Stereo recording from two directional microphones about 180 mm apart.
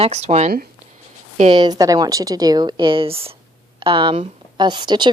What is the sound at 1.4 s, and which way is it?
A woman's voice, 25° right (ahead or behind).